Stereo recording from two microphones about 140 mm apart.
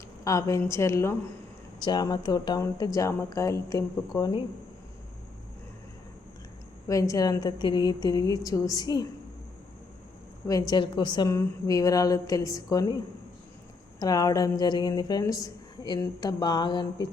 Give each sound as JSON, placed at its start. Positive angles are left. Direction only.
{"t": 0.3, "sound": "a woman's voice", "side_deg": 25}
{"t": 6.8, "sound": "a woman's voice", "side_deg": 25}
{"t": 10.4, "sound": "a woman's voice", "side_deg": 25}
{"t": 14.0, "sound": "a woman's voice", "side_deg": 25}